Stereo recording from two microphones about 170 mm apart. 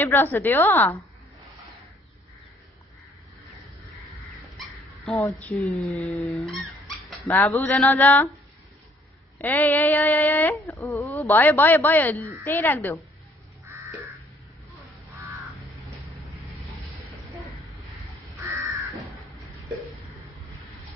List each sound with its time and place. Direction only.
0.0 s speech: 10° left (ahead or behind)
4.6 s dog: centre (ahead or behind)
5.1 s speech: 15° left (ahead or behind)
5.6 s speech: centre (ahead or behind)
9.4 s speech: 10° left (ahead or behind)